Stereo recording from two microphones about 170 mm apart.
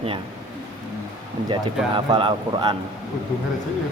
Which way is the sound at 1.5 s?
30° right (ahead or behind).